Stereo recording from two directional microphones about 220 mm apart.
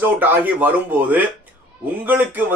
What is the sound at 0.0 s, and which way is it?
Speech, 10° right (ahead or behind).